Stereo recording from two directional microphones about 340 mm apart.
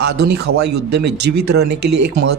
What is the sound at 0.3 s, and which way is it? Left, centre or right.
Speech, right.